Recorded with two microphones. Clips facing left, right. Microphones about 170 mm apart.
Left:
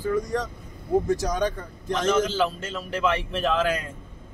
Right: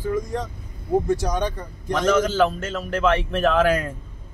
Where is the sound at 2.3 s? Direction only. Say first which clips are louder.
Right 5 dB; 50° right (ahead or behind).